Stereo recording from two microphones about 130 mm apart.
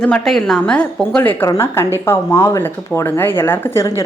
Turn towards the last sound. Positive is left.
turn(degrees=20)  # may be behind; listen again after turning